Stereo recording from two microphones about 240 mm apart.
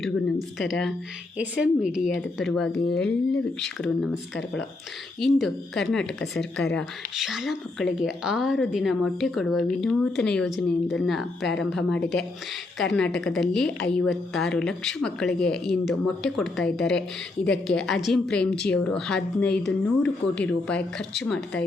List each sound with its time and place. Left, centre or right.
0.6 s speech: centre
5.2 s speech: centre